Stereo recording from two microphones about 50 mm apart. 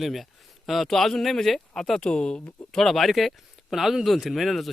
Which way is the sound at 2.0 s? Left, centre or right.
Centre.